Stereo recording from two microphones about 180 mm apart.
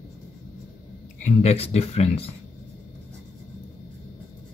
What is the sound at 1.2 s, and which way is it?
Speech, 35° left (ahead or behind).